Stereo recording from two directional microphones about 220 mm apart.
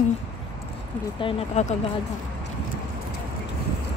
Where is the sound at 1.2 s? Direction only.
30° left (ahead or behind).